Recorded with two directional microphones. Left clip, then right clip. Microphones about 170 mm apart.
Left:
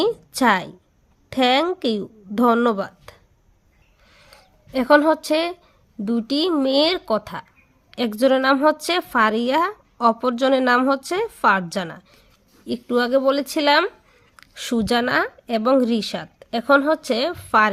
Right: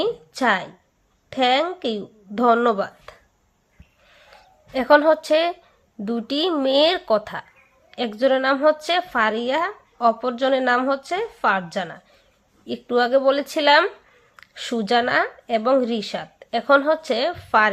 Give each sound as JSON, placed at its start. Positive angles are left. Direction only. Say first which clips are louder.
{"t": 0.0, "sound": "a woman's voice", "louder": "left 2 dB", "side_deg": 40}
{"t": 4.1, "sound": "a sound", "louder": "right 1 dB", "side_deg": 35}
{"t": 6.1, "sound": "speech", "louder": "left 1 dB", "side_deg": 25}
{"t": 7.9, "sound": "a woman's voice", "louder": "left 1 dB", "side_deg": 40}